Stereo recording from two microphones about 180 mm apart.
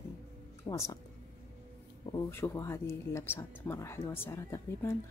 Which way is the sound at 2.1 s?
15° left (ahead or behind).